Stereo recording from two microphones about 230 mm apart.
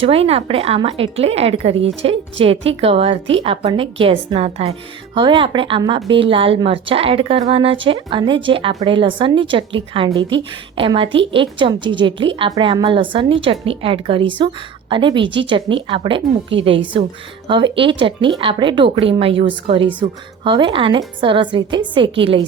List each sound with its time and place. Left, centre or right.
0.0 s a woman's voice: right